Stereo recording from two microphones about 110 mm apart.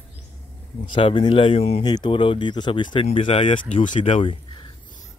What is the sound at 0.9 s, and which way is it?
Speech, 50° left (ahead or behind).